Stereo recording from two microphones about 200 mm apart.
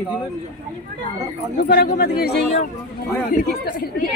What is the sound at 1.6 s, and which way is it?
Speech, 50° left (ahead or behind).